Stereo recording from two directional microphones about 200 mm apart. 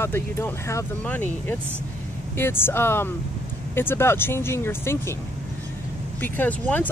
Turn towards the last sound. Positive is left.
turn(degrees=10)  # may be behind; listen again after turning